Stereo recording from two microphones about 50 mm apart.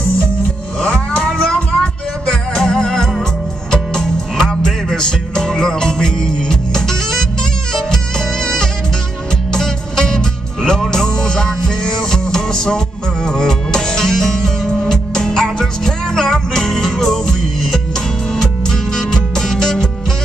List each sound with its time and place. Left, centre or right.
0.7 s music: centre